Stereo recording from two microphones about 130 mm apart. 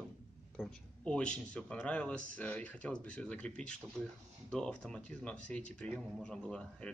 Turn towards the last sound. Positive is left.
turn(degrees=5)  # may be behind; listen again after turning